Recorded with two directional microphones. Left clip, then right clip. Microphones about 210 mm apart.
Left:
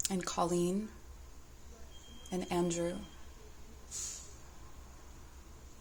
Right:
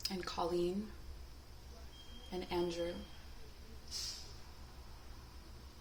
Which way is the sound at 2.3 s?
50° left (ahead or behind).